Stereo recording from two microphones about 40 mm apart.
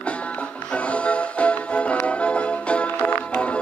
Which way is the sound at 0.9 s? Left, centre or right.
Left.